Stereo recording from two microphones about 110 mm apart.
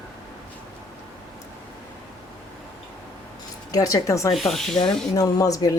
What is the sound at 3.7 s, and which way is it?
Speech, 35° left (ahead or behind).